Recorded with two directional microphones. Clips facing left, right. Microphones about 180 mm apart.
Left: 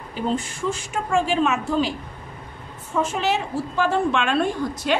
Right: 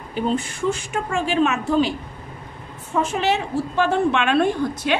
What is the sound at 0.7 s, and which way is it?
A woman's voice, 60° right (ahead or behind).